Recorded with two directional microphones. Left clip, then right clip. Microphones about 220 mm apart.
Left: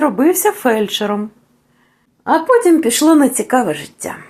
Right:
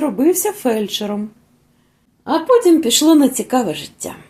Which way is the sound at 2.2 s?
10° left (ahead or behind).